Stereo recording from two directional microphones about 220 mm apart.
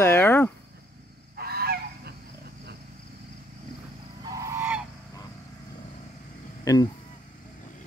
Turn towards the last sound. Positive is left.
turn(degrees=15)  # may be behind; listen again after turning